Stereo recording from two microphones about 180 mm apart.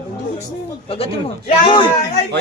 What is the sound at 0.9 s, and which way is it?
A man's voice, 30° left (ahead or behind).